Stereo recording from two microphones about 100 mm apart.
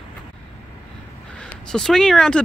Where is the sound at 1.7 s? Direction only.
5° left (ahead or behind).